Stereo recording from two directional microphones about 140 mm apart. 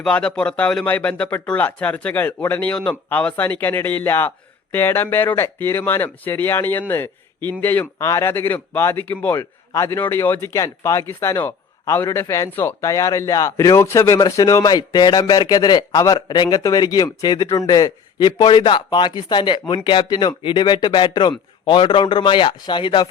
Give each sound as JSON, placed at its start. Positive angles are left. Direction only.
{"t": 0.0, "sound": "speech", "side_deg": 5}